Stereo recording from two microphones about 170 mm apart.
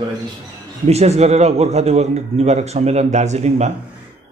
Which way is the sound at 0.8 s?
40° right (ahead or behind).